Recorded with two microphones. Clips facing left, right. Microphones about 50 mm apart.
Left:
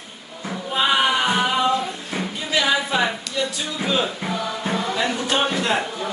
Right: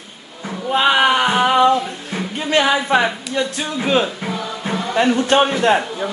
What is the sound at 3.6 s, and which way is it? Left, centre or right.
Speech, right.